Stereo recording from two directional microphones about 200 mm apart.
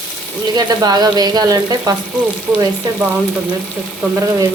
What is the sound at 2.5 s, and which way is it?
Frying, 5° right (ahead or behind).